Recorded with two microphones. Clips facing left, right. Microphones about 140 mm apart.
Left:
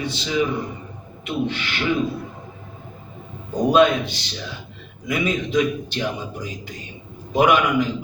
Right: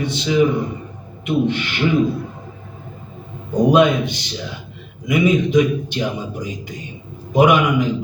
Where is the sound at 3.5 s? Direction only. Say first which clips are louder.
Right 2 dB; 15° right (ahead or behind).